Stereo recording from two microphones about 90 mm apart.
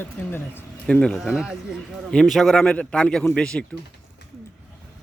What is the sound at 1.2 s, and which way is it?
A man's voice, centre (ahead or behind).